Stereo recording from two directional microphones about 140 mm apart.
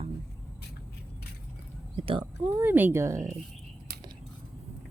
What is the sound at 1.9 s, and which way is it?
Speech, 35° right (ahead or behind).